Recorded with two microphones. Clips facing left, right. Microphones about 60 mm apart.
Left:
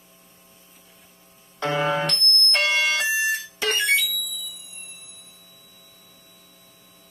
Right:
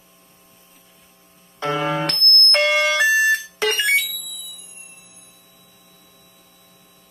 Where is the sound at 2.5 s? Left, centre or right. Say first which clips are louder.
Right 5 dB; right.